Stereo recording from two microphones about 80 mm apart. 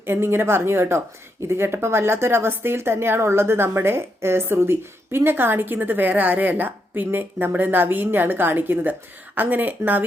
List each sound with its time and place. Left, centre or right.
0.0 s a woman's voice: right